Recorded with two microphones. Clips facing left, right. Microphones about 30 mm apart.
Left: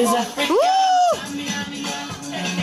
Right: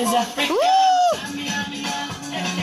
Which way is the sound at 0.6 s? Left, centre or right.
Centre.